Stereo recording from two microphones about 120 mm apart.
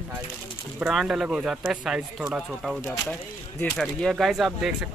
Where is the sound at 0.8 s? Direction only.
Centre (ahead or behind).